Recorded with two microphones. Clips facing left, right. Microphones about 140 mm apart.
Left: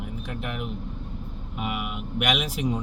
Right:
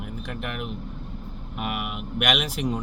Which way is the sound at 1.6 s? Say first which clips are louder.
Even; 60° right (ahead or behind).